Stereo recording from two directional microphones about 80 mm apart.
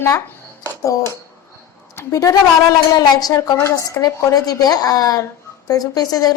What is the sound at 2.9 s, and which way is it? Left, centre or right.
A woman's voice, left.